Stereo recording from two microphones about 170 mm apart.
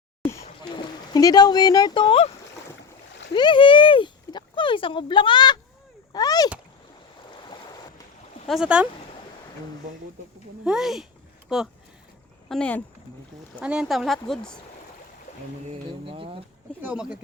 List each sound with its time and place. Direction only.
1.1 s speech: 25° left (ahead or behind)
3.3 s speech: 30° left (ahead or behind)
8.4 s speech: 5° right (ahead or behind)
10.6 s speech: 5° right (ahead or behind)
13.6 s speech: 5° right (ahead or behind)
16.0 s speech: 30° right (ahead or behind)
16.8 s speech: 5° right (ahead or behind)